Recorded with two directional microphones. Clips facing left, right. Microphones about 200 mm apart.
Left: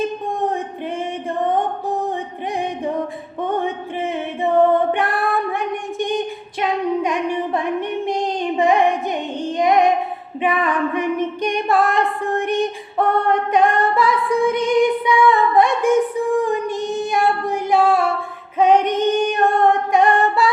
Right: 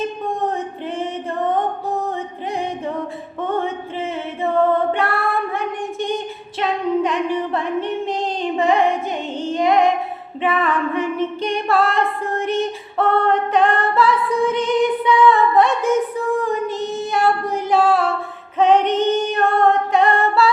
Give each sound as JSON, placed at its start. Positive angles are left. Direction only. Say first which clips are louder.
{"t": 4.4, "sound": "female singing", "louder": "left 2 dB", "side_deg": 15}